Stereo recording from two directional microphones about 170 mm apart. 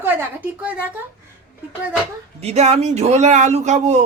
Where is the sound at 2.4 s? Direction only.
40° right (ahead or behind).